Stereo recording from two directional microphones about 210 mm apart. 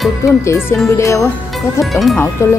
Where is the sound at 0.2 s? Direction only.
15° left (ahead or behind).